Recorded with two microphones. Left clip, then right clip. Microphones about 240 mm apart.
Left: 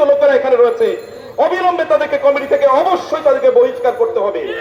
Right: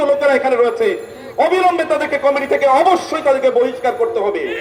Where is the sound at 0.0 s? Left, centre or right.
Right.